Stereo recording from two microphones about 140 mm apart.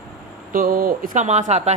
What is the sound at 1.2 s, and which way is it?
Speech, 50° right (ahead or behind).